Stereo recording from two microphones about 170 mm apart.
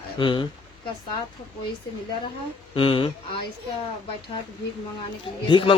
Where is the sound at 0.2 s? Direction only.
30° left (ahead or behind).